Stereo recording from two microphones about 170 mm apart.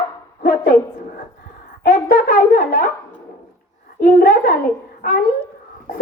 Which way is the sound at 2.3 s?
50° left (ahead or behind).